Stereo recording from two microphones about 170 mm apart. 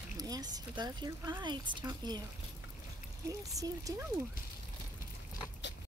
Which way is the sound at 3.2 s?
20° right (ahead or behind).